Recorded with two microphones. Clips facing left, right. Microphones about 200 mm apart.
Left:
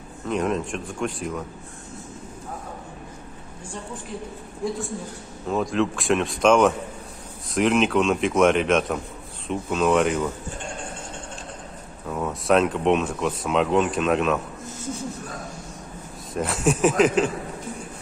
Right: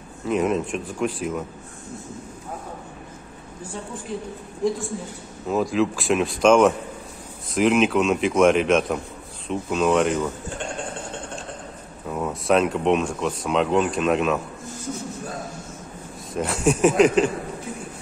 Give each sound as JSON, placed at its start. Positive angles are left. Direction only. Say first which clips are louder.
{"t": 0.3, "sound": "speech", "louder": "right 3 dB", "side_deg": -5}
{"t": 4.1, "sound": "speech", "louder": "right 4 dB", "side_deg": 0}
{"t": 5.5, "sound": "speech", "louder": "right 2 dB", "side_deg": -5}
{"t": 12.1, "sound": "speech", "louder": "even", "side_deg": 0}
{"t": 16.3, "sound": "speech", "louder": "right 1 dB", "side_deg": 0}